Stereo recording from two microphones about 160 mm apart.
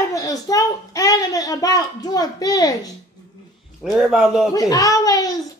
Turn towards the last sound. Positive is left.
turn(degrees=20)  # may be behind; listen again after turning